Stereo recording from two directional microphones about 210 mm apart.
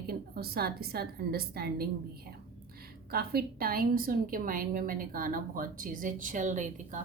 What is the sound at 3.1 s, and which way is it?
A woman's voice, 45° right (ahead or behind).